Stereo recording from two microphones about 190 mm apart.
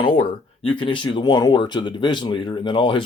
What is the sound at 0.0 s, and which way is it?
Speech, 25° left (ahead or behind).